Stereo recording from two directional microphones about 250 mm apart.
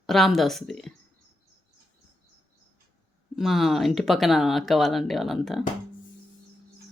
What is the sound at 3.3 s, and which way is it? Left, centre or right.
Speech, centre.